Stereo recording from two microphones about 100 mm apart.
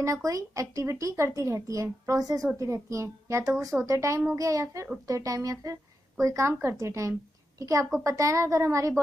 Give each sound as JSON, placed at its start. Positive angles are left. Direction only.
{"t": 0.0, "sound": "a woman's voice", "side_deg": -35}